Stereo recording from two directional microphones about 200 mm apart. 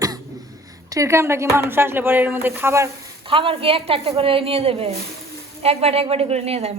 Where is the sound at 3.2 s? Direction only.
25° right (ahead or behind).